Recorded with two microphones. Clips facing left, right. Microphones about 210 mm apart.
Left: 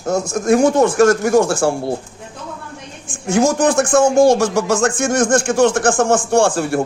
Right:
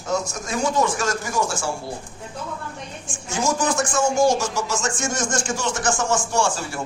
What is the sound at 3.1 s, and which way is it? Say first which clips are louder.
Speech: left 9 dB; 55° left (ahead or behind).